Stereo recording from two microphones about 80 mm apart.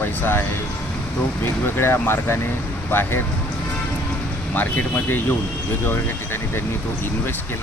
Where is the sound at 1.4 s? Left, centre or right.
Left.